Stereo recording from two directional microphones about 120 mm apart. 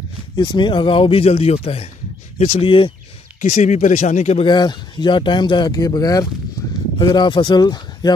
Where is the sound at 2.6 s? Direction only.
45° left (ahead or behind).